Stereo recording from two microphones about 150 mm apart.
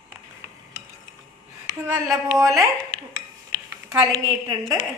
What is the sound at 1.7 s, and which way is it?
Speech, 20° right (ahead or behind).